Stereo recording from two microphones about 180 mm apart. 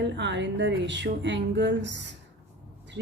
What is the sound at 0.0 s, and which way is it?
A woman's voice, 80° right.